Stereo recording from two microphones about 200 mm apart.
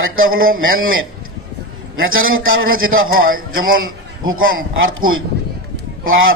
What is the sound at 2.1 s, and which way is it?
Speech, 90° right.